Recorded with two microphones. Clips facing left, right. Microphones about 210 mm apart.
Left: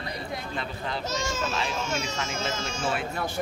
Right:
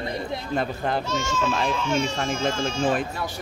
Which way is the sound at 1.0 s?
40° left (ahead or behind).